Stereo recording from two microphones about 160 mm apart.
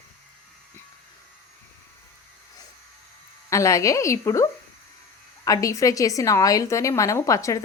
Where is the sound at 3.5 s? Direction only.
20° left (ahead or behind).